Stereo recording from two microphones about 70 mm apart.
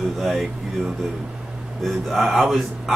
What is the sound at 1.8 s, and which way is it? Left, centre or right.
Speech, centre.